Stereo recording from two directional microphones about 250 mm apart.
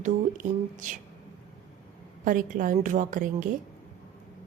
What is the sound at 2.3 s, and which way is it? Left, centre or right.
A woman's voice, right.